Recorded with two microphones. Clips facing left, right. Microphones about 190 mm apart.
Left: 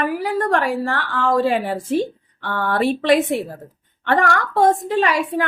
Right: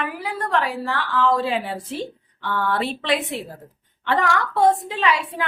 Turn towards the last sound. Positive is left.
turn(degrees=45)  # may be behind; listen again after turning